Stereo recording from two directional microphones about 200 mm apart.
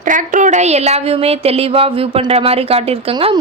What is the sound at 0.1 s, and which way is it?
A woman's voice, 40° right (ahead or behind).